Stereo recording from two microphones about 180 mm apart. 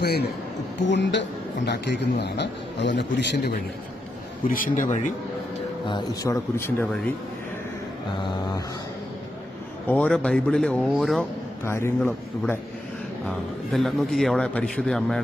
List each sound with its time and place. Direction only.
0.0 s a man's voice: 65° left (ahead or behind)
0.8 s a man's voice: 80° left
4.4 s speech: 50° left (ahead or behind)
5.9 s speech: 20° left (ahead or behind)
8.2 s a sound: 25° left (ahead or behind)
9.9 s a man's voice: 5° left (ahead or behind)
11.6 s speech: 15° left (ahead or behind)
13.7 s a man's voice: centre (ahead or behind)